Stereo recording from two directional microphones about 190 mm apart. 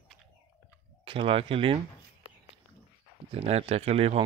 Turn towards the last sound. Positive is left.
turn(degrees=-35)  # may be behind; listen again after turning